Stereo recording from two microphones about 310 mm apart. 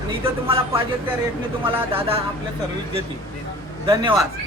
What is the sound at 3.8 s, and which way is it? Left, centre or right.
Speech, centre.